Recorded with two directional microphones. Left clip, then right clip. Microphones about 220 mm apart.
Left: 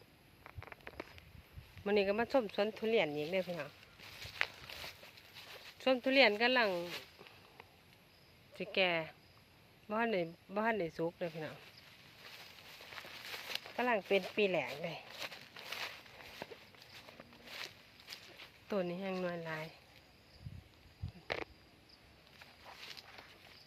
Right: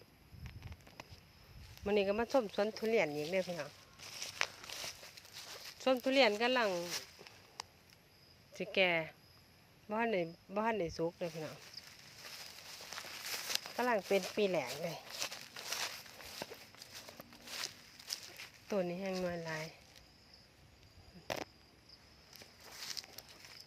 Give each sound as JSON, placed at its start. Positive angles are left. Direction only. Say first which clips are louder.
{"t": 1.8, "sound": "speech", "louder": "left 1 dB", "side_deg": 0}
{"t": 4.1, "sound": "a sound", "louder": "even", "side_deg": -40}
{"t": 5.8, "sound": "speech", "louder": "left 1 dB", "side_deg": -5}
{"t": 8.5, "sound": "speech", "louder": "right 1 dB", "side_deg": -15}
{"t": 9.9, "sound": "speech", "louder": "even", "side_deg": -5}
{"t": 12.2, "sound": "a sound", "louder": "right 3 dB", "side_deg": -55}
{"t": 13.7, "sound": "speech", "louder": "left 1 dB", "side_deg": -5}
{"t": 15.0, "sound": "a sound", "louder": "right 3 dB", "side_deg": -50}
{"t": 18.7, "sound": "speech", "louder": "right 1 dB", "side_deg": -5}